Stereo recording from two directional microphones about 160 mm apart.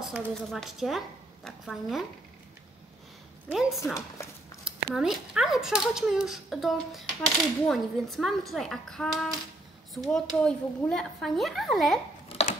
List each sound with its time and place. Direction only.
0.0 s speech: centre (ahead or behind)
3.8 s speech: 15° left (ahead or behind)
4.6 s speech: 5° right (ahead or behind)
12.3 s a sound: 40° left (ahead or behind)